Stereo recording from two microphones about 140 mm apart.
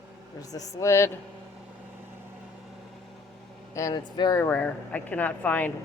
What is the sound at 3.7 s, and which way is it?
Speech, 25° left (ahead or behind).